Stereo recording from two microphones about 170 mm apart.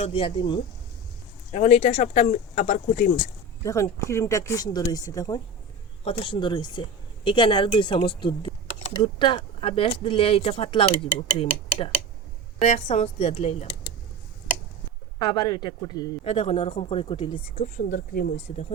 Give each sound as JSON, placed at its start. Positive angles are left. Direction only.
{"t": 0.0, "sound": "speech", "side_deg": 30}
{"t": 1.5, "sound": "speech", "side_deg": 40}
{"t": 3.6, "sound": "speech", "side_deg": 20}
{"t": 15.2, "sound": "speech", "side_deg": 25}
{"t": 16.2, "sound": "speech", "side_deg": 35}
{"t": 17.6, "sound": "speech", "side_deg": 55}
{"t": 18.3, "sound": "speech", "side_deg": 40}